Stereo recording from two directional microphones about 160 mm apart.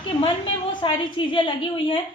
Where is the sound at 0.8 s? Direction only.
30° left (ahead or behind).